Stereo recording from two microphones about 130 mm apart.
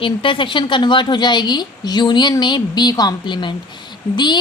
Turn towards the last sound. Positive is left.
turn(degrees=35)  # may be behind; listen again after turning